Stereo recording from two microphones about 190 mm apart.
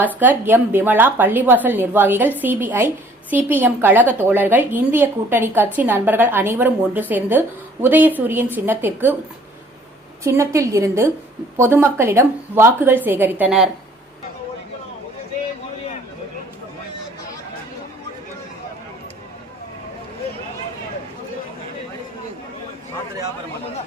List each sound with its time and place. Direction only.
0.0 s a woman's voice: 10° right (ahead or behind)
10.2 s a woman's voice: 15° right (ahead or behind)